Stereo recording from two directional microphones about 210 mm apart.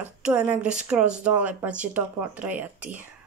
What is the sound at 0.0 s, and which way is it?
A woman's voice, 5° right (ahead or behind).